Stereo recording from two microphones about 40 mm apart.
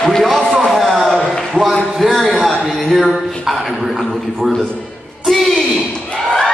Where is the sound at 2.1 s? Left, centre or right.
Centre.